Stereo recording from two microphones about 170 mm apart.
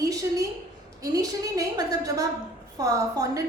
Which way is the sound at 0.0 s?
20° right (ahead or behind).